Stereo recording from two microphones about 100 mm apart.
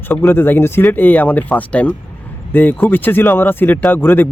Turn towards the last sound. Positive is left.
turn(degrees=20)  # may be behind; listen again after turning